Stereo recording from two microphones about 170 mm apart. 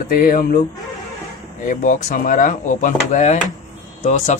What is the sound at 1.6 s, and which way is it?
Speech, 50° left (ahead or behind).